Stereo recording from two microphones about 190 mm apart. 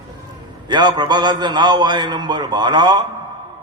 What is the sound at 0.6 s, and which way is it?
A man's voice, 25° right (ahead or behind).